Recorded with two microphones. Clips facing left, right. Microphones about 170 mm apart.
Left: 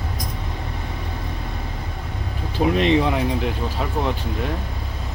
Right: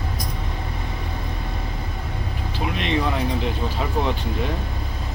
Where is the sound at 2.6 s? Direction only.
40° left (ahead or behind).